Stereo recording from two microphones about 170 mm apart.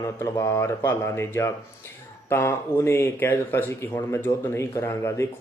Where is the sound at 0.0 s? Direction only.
15° left (ahead or behind).